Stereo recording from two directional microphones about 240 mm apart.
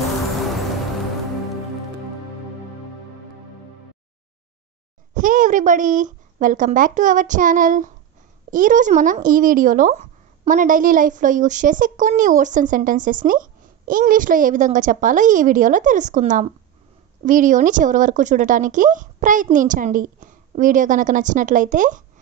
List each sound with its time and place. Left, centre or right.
5.1 s speech: right